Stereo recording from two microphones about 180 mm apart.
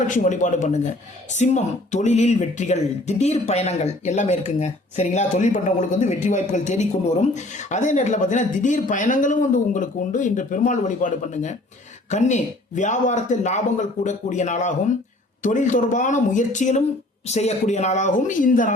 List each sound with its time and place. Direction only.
0.1 s speech: 45° left (ahead or behind)